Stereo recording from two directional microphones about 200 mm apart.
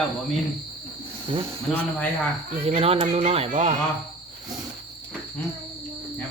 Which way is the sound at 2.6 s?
30° right (ahead or behind).